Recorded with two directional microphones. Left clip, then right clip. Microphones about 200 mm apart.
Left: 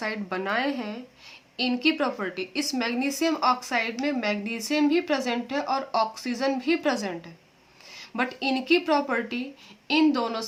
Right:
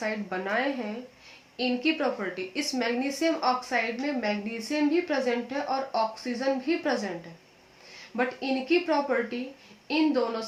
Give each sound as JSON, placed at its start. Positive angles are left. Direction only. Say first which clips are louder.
{"t": 0.0, "sound": "a woman's voice", "louder": "left 1 dB", "side_deg": 30}
{"t": 8.1, "sound": "a woman's voice", "louder": "left 2 dB", "side_deg": 35}